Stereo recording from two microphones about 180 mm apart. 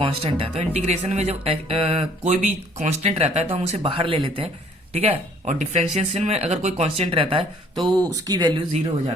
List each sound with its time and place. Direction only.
0.0 s speech: 30° right (ahead or behind)